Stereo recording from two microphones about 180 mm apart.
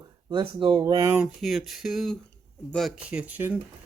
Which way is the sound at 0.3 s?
25° right (ahead or behind).